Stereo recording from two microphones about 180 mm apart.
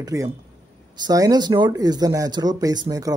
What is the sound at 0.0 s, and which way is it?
Speech, 20° right (ahead or behind).